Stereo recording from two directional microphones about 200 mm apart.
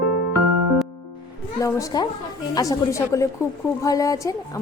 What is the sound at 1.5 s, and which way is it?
A woman's voice, 15° left (ahead or behind).